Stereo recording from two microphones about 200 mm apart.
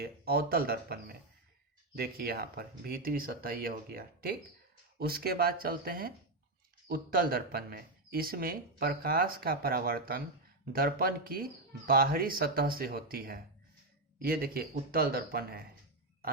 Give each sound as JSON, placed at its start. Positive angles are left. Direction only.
{"t": 0.0, "sound": "speech", "side_deg": -50}